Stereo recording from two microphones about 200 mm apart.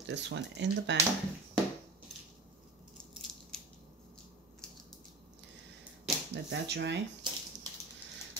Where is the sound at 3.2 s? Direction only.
Centre (ahead or behind).